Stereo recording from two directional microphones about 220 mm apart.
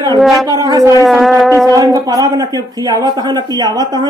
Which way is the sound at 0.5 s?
15° right (ahead or behind).